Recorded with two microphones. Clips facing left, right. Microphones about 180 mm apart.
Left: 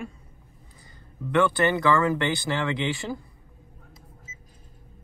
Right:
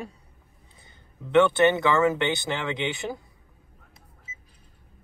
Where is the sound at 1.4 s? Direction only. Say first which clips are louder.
Right 3 dB; 25° right (ahead or behind).